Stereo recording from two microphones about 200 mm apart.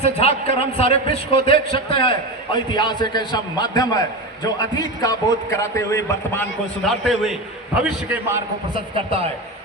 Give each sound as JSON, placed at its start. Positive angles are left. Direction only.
{"t": 0.0, "sound": "a man's voice", "side_deg": 30}
{"t": 8.7, "sound": "a man's voice", "side_deg": -25}